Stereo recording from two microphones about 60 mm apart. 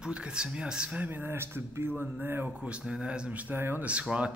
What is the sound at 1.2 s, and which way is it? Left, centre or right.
Speech, right.